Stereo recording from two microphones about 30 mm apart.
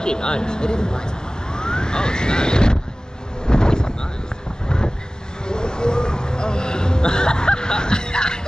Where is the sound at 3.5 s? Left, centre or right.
Left.